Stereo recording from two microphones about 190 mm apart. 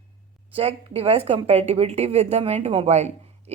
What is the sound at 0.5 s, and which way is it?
A woman's voice, 30° right (ahead or behind).